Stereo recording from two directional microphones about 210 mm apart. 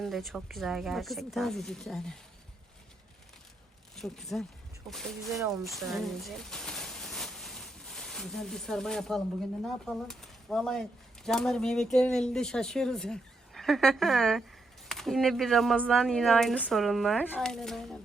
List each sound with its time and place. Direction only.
0.0 s speech: centre (ahead or behind)
3.9 s speech: centre (ahead or behind)
5.5 s a sound: centre (ahead or behind)
9.6 s speech: centre (ahead or behind)